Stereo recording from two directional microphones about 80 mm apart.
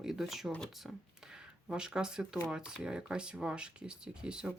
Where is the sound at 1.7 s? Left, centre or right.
Centre.